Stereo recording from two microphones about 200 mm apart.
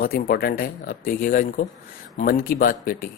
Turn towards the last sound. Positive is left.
turn(degrees=45)  # may be behind; listen again after turning